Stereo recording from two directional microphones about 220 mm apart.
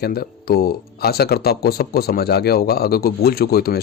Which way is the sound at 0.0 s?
45° left (ahead or behind).